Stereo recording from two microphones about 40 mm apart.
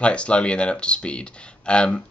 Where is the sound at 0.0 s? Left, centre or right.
Left.